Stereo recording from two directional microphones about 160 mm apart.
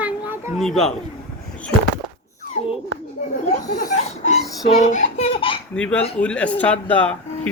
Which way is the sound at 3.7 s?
70° left (ahead or behind).